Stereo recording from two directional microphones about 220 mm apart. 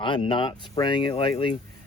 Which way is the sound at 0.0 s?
20° left (ahead or behind).